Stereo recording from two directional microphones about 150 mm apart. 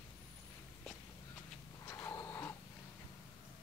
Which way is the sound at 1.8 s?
20° left (ahead or behind).